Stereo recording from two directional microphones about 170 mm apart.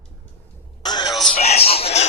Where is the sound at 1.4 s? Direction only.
35° left (ahead or behind).